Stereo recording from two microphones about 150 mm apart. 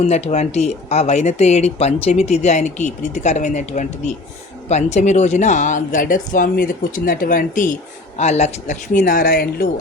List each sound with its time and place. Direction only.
0.0 s speech: 45° left (ahead or behind)
8.2 s speech: 50° left (ahead or behind); by 9.6 s 85° left